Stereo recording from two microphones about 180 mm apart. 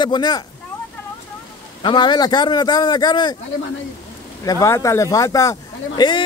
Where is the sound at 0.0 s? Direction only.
25° left (ahead or behind).